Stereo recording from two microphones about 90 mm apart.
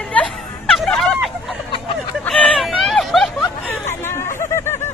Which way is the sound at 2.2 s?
5° left (ahead or behind).